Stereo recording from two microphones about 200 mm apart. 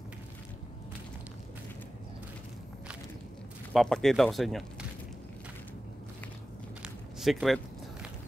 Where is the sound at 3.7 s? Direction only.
Centre (ahead or behind).